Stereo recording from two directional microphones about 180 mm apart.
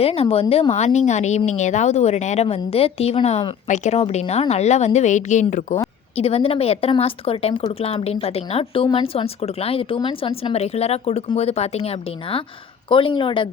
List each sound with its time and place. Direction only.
0.0 s speech: 35° left (ahead or behind)